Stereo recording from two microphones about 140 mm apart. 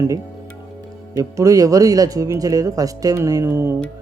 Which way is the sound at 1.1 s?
25° right (ahead or behind).